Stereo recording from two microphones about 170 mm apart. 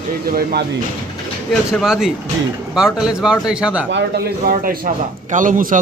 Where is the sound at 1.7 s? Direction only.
5° right (ahead or behind).